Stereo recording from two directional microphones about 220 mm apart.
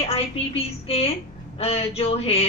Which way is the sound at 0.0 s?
25° left (ahead or behind).